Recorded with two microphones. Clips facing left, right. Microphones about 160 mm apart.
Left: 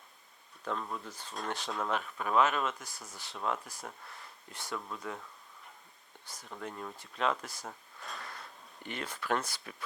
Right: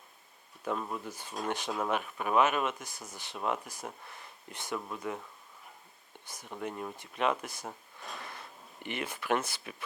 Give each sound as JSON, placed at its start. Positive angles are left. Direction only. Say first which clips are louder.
{"t": 0.6, "sound": "speech", "louder": "right 3 dB", "side_deg": -10}
{"t": 6.2, "sound": "speech", "louder": "right 4 dB", "side_deg": -20}
{"t": 8.2, "sound": "a sound", "louder": "right 1 dB", "side_deg": -20}